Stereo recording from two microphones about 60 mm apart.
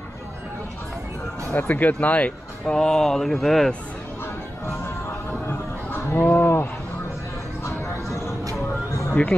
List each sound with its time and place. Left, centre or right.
1.5 s speech: left; by 3.7 s centre
5.5 s a sound: left
7.6 s music: left